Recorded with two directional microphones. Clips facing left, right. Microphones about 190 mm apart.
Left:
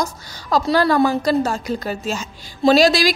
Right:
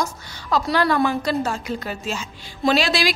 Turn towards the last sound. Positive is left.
turn(degrees=40)  # may be behind; listen again after turning